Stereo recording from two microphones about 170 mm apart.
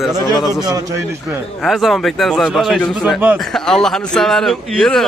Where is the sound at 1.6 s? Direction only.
Centre (ahead or behind).